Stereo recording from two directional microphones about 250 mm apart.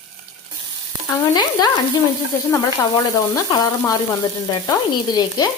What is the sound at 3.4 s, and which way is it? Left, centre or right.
Stir, centre.